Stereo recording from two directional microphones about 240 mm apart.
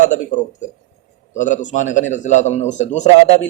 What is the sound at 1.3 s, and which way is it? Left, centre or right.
Speech, left.